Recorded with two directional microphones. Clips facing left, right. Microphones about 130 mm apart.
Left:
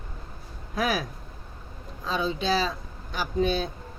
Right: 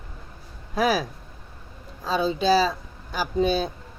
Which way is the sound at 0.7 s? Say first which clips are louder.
Right 5 dB; 35° right (ahead or behind).